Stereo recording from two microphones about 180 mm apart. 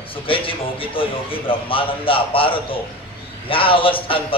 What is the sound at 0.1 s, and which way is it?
Speech, 30° left (ahead or behind).